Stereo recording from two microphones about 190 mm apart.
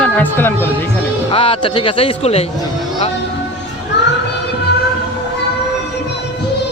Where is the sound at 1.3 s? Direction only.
30° left (ahead or behind).